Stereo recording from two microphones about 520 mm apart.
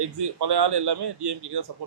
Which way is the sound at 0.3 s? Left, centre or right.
Right.